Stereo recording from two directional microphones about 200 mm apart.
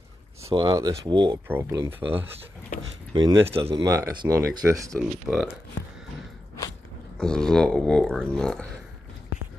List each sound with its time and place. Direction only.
0.4 s speech: 15° right (ahead or behind)
5.3 s speech: 5° right (ahead or behind)
7.2 s speech: 5° left (ahead or behind)